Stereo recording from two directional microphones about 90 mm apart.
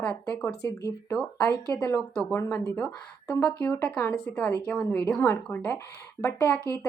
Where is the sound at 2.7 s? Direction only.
10° left (ahead or behind).